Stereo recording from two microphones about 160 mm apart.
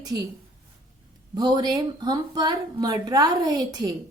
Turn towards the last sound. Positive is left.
turn(degrees=-25)  # may be behind; listen again after turning